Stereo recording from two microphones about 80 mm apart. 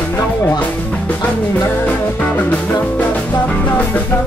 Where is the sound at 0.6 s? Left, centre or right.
Left.